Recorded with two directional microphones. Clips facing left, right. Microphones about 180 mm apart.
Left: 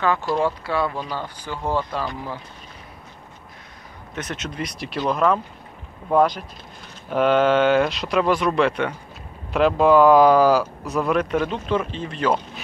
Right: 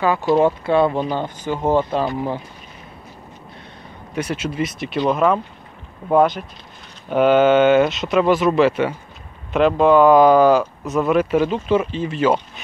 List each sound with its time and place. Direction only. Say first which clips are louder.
0.0 s speech: right 3 dB; 15° right (ahead or behind)
0.4 s speech: right 7 dB; 25° right (ahead or behind)
4.1 s speech: right 7 dB; 10° right (ahead or behind)